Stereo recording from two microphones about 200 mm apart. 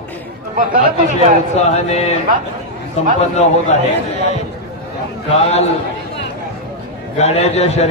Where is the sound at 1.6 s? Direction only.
35° left (ahead or behind).